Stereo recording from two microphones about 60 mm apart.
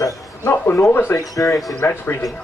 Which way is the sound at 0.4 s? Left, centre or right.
Left.